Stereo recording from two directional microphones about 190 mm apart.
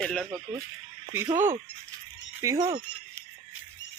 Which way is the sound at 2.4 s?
15° right (ahead or behind).